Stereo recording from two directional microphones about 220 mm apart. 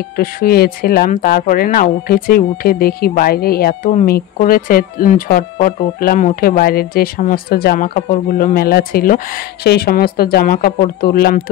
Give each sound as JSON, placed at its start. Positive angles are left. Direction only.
{"t": 0.2, "sound": "speech", "side_deg": 40}